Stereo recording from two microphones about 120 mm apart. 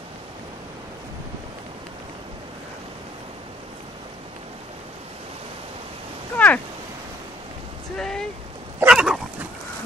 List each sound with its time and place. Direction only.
6.3 s a sound: 10° left (ahead or behind)
8.0 s boat: 5° left (ahead or behind)
8.8 s dog: 5° right (ahead or behind)